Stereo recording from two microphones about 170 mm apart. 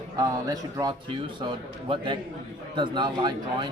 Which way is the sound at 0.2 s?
20° right (ahead or behind).